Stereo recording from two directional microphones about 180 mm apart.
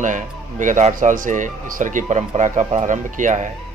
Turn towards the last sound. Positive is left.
turn(degrees=-45)  # may be behind; listen again after turning